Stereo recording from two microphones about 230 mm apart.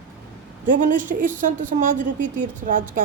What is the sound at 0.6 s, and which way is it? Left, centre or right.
Speech, right.